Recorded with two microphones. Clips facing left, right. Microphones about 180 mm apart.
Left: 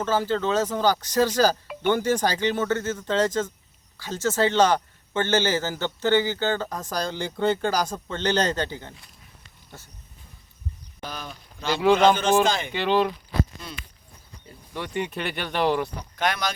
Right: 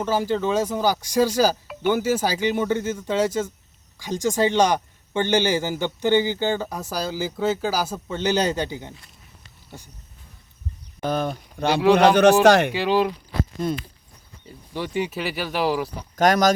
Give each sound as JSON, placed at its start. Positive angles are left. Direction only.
{"t": 0.0, "sound": "speech", "side_deg": -10}
{"t": 11.0, "sound": "a man's voice", "side_deg": -50}
{"t": 12.7, "sound": "speech", "side_deg": -5}
{"t": 13.6, "sound": "speech", "side_deg": -50}
{"t": 14.8, "sound": "speech", "side_deg": -5}
{"t": 16.1, "sound": "speech", "side_deg": -45}